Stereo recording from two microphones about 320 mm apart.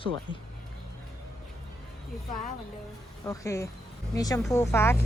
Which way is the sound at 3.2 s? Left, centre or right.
Centre.